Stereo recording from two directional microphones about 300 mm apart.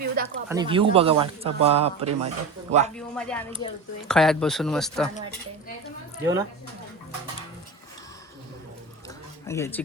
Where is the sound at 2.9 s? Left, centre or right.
Centre.